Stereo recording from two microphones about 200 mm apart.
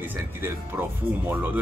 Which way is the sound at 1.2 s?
10° right (ahead or behind).